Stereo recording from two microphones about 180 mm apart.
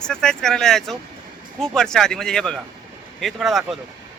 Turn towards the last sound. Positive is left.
turn(degrees=0)  # may be behind; listen again after turning